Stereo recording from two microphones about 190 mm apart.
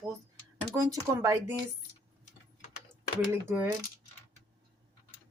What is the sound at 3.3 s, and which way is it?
Speech, 10° right (ahead or behind).